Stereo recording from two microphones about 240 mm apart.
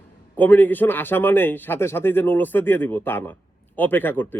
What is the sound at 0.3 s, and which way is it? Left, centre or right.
A man's voice, centre.